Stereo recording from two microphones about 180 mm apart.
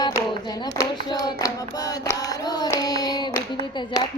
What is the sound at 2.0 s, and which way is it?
Child singing, 20° left (ahead or behind).